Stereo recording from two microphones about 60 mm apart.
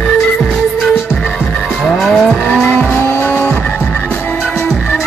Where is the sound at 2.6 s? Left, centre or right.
Left.